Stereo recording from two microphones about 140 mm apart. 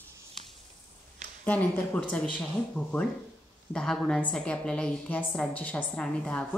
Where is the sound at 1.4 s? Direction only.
10° left (ahead or behind).